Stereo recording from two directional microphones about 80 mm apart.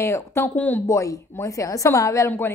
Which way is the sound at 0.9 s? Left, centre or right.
Left.